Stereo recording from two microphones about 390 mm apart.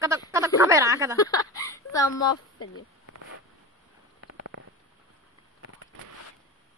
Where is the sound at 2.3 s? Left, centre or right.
Left.